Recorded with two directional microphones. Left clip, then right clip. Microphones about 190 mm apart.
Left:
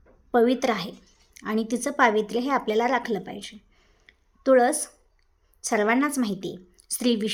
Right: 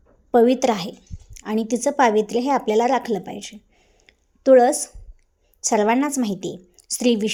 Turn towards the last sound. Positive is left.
turn(degrees=-15)  # may be behind; listen again after turning